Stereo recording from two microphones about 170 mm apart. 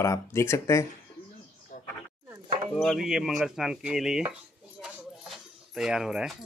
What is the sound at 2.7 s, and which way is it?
Dishes, centre (ahead or behind).